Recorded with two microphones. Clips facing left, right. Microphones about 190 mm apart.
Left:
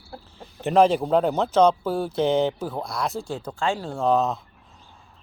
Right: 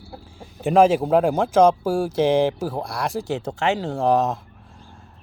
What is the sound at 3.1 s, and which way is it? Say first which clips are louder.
Speech: right 5 dB; 90° right.